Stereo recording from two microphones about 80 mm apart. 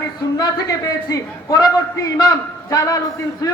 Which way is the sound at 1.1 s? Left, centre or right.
Left.